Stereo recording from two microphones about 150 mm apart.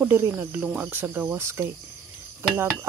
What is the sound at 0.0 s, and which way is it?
Speech, 20° right (ahead or behind).